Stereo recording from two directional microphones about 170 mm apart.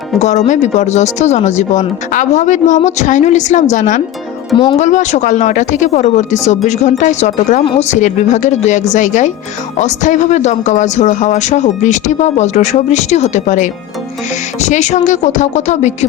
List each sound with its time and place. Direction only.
0.2 s speech: 45° left (ahead or behind)
4.5 s speech: 30° left (ahead or behind)
4.8 s speech: 45° left (ahead or behind)